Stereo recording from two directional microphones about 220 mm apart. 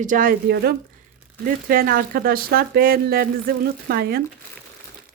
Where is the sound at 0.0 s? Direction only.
40° right (ahead or behind).